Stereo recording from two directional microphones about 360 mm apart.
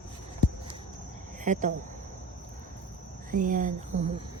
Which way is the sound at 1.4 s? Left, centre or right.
Right.